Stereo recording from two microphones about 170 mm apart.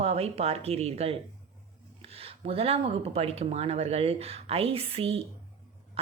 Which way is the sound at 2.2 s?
35° right (ahead or behind).